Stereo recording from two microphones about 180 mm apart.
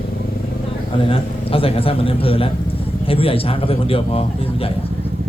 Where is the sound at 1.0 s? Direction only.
30° left (ahead or behind).